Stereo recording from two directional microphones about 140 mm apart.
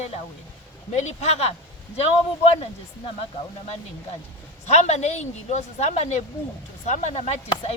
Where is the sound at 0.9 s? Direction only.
55° left (ahead or behind).